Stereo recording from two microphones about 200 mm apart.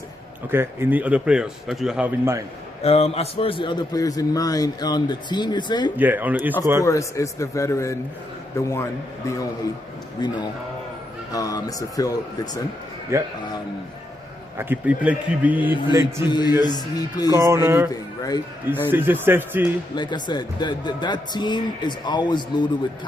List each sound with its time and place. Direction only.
0.5 s a man's voice: 10° right (ahead or behind)
2.8 s a man's voice: 30° left (ahead or behind)
6.0 s a man's voice: 10° right (ahead or behind)
6.8 s a man's voice: 15° left (ahead or behind)
13.1 s a man's voice: 15° right (ahead or behind)
14.6 s a man's voice: 10° right (ahead or behind)
16.2 s a man's voice: 20° left (ahead or behind)
17.3 s a man's voice: 15° right (ahead or behind)
18.2 s speech: 20° left (ahead or behind)
18.9 s a man's voice: 10° right (ahead or behind)
20.0 s a man's voice: 20° left (ahead or behind)